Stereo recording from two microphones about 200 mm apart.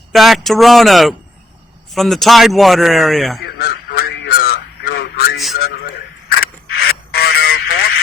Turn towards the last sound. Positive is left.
turn(degrees=50)  # may be behind; listen again after turning